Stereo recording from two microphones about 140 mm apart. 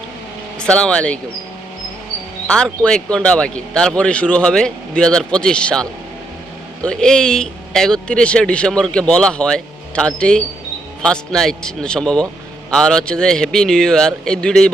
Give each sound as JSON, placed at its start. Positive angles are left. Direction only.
{"t": 0.6, "sound": "speech", "side_deg": 5}
{"t": 2.5, "sound": "speech", "side_deg": 5}